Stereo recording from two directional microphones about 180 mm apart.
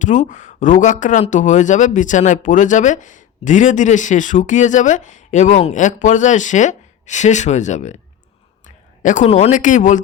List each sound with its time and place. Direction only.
0.0 s speech: 45° left (ahead or behind)